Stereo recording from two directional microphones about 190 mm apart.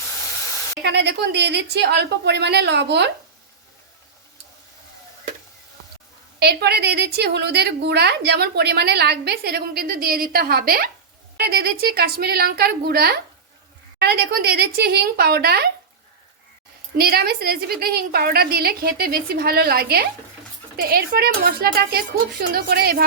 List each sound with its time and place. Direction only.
0.2 s spray: 15° left (ahead or behind)
0.8 s a woman's voice: 65° right (ahead or behind)
6.4 s a woman's voice: 60° right (ahead or behind)
17.0 s a woman's voice: 55° right (ahead or behind)